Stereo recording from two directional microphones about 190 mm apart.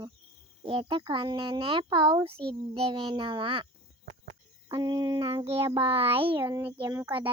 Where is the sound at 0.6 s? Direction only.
25° right (ahead or behind).